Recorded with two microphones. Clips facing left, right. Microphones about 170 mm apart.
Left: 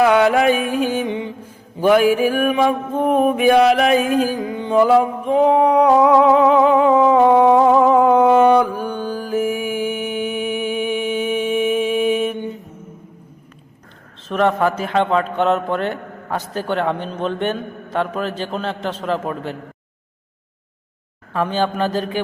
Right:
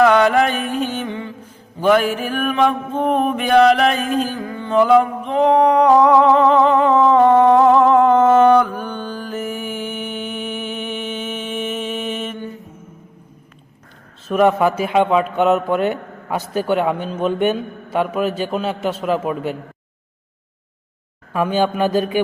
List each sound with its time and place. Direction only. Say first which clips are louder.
0.0 s mantra: even; 5° left (ahead or behind)
14.3 s a man's voice: right 2 dB; 10° right (ahead or behind)
21.3 s a man's voice: right 2 dB; 10° right (ahead or behind)